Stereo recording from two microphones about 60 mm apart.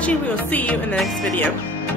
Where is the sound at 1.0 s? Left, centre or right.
Centre.